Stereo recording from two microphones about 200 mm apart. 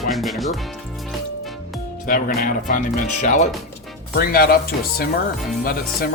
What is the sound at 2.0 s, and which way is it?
Speech, 45° left (ahead or behind).